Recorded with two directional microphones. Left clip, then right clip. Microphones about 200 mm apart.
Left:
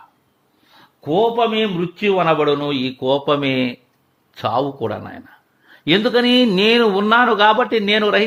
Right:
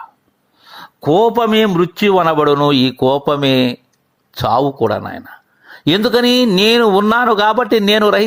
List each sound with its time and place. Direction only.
0.7 s a man's voice: 45° right (ahead or behind)